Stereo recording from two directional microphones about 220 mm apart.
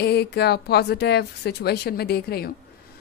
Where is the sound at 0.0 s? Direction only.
50° left (ahead or behind).